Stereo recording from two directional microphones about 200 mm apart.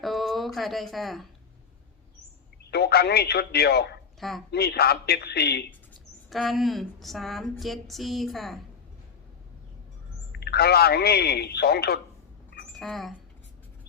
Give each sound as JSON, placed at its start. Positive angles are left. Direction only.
{"t": 0.0, "sound": "speech", "side_deg": 0}
{"t": 2.6, "sound": "a man's voice", "side_deg": 55}
{"t": 4.2, "sound": "speech", "side_deg": 0}
{"t": 4.5, "sound": "a man's voice", "side_deg": 55}
{"t": 6.3, "sound": "a sound", "side_deg": 0}
{"t": 10.3, "sound": "a man's voice", "side_deg": 55}
{"t": 12.8, "sound": "a sound", "side_deg": 0}